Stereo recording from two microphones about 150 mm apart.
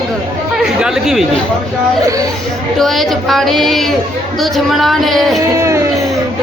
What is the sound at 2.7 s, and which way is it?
Speech, centre (ahead or behind).